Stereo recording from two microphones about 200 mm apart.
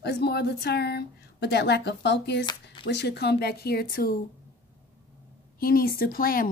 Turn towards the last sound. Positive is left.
turn(degrees=45)  # may be behind; listen again after turning